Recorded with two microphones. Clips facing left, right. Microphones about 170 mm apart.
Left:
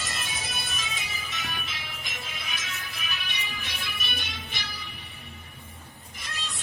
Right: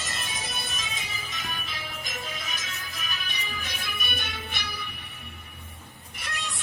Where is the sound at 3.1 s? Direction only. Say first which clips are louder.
Right 1 dB; 40° right (ahead or behind).